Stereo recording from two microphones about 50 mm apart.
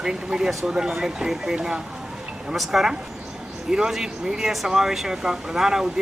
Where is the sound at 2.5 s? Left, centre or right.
Centre.